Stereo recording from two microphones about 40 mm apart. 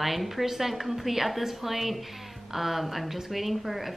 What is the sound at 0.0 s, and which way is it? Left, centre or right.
A woman's voice, centre.